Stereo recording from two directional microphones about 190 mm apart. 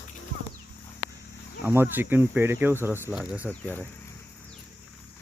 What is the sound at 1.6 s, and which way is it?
Speech, 10° right (ahead or behind).